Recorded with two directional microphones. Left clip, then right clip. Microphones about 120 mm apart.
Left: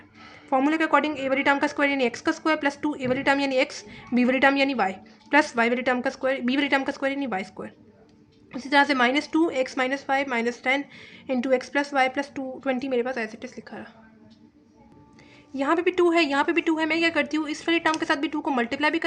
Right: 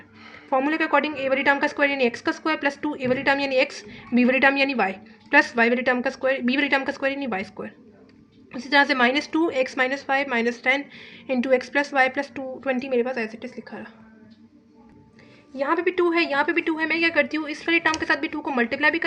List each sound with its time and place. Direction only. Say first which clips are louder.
0.5 s a woman's voice: even; 30° left (ahead or behind)
15.5 s a woman's voice: even; 45° left (ahead or behind)